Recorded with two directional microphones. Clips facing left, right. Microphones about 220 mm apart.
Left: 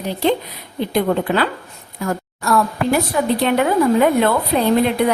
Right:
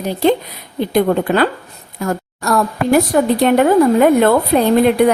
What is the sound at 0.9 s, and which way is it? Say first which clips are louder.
Speech: right 4 dB; 45° right (ahead or behind).